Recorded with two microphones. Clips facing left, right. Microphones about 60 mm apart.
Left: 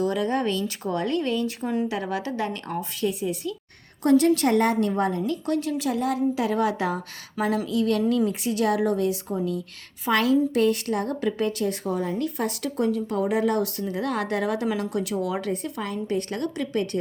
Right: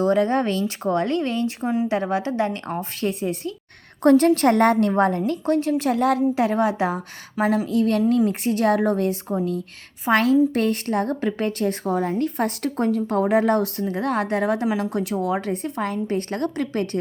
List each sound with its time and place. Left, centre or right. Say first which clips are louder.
0.0 s a woman's voice: right 5 dB; right
1.6 s speech: right 5 dB; centre
1.9 s a woman's voice: right 5 dB; right
3.0 s a woman's voice: right 1 dB; right
6.3 s a woman's voice: right 3 dB; right
7.5 s a woman's voice: right 2 dB; right